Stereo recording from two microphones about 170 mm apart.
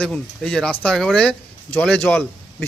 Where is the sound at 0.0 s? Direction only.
5° left (ahead or behind).